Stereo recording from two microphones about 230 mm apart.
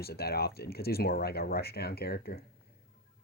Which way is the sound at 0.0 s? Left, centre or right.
Left.